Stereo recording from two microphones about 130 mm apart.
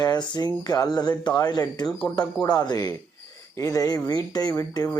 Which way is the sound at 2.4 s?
30° left (ahead or behind).